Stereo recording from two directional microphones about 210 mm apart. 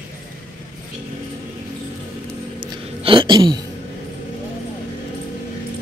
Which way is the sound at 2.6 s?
25° right (ahead or behind).